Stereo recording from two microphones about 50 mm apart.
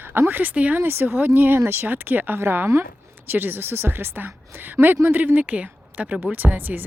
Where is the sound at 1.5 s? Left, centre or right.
Right.